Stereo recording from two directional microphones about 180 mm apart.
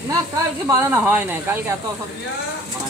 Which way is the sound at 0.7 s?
10° right (ahead or behind).